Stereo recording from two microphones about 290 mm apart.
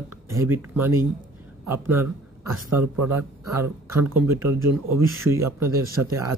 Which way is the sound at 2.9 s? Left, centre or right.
Right.